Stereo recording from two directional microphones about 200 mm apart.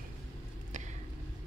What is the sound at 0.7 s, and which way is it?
Vehicle, 35° right (ahead or behind).